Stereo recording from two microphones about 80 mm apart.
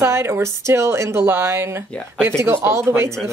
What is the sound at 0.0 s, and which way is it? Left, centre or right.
A woman's voice, right.